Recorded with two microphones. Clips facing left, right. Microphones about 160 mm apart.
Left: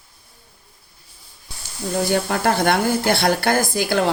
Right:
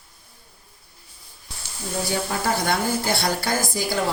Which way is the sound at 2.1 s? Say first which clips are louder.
Left 4 dB; 60° left (ahead or behind).